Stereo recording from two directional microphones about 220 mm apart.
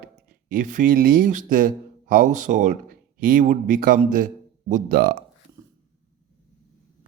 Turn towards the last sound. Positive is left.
turn(degrees=-40)  # may be behind; listen again after turning